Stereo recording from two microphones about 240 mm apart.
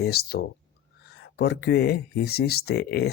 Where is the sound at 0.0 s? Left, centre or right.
Left.